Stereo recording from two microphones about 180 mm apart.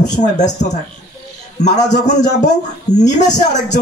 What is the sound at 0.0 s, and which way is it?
Speech, 20° left (ahead or behind).